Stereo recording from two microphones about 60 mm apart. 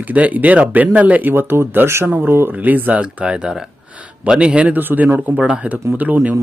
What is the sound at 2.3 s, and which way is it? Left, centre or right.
Speech, right.